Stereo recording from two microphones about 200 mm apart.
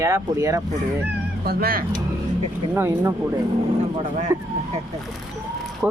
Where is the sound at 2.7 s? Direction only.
10° right (ahead or behind).